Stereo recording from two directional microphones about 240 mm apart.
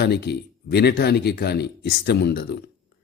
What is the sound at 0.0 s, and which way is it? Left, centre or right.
Speech, left.